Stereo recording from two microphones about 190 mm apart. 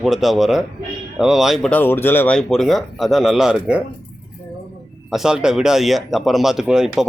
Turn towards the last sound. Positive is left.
turn(degrees=-5)  # may be behind; listen again after turning